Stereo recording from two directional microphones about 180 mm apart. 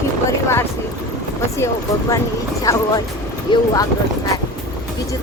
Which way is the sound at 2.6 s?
20° left (ahead or behind).